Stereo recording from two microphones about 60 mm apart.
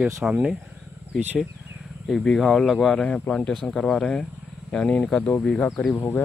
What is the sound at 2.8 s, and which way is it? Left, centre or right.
Speech, centre.